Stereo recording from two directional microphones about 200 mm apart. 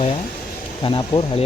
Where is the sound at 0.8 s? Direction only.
25° left (ahead or behind).